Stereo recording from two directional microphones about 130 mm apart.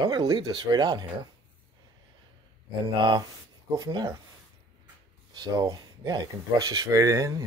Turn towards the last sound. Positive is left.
turn(degrees=-25)  # may be behind; listen again after turning